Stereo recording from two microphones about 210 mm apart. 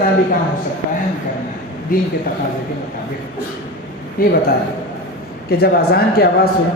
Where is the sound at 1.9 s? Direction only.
40° left (ahead or behind).